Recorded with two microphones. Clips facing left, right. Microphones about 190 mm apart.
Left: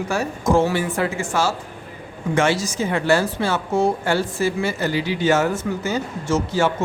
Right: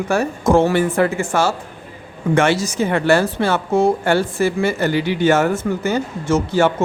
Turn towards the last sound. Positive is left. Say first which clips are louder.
# right 4 dB
turn(degrees=-60)  # may be behind; listen again after turning